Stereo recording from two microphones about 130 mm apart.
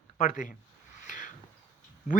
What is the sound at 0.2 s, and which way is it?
Speech, 90° left.